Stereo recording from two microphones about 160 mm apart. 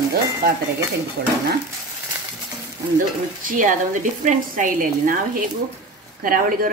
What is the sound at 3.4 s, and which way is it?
Speech, 55° right (ahead or behind).